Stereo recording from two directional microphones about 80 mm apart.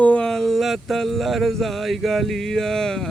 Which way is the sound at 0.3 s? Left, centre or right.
Centre.